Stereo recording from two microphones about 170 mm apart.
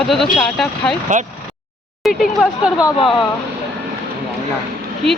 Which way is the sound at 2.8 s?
20° left (ahead or behind).